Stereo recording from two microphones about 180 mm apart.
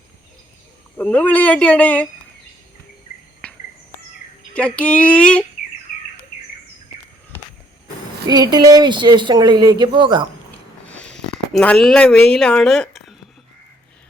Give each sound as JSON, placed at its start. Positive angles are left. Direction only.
{"t": 0.9, "sound": "speech", "side_deg": 10}
{"t": 3.4, "sound": "cricket", "side_deg": 5}
{"t": 4.5, "sound": "speech", "side_deg": 5}
{"t": 8.3, "sound": "speech", "side_deg": -25}
{"t": 10.8, "sound": "a sound", "side_deg": 5}